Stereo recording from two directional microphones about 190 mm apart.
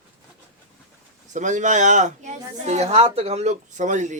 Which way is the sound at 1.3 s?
40° right (ahead or behind).